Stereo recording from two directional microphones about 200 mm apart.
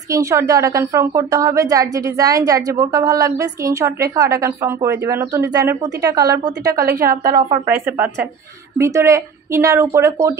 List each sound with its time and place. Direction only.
0.1 s a woman's voice: 15° right (ahead or behind)
6.9 s a woman's voice: 45° right (ahead or behind)
7.2 s a woman's voice: 20° right (ahead or behind)